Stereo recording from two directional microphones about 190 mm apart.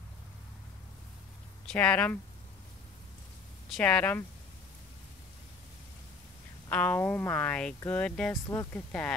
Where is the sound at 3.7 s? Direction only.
5° left (ahead or behind).